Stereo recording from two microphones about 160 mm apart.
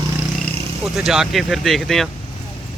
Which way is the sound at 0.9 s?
Centre (ahead or behind).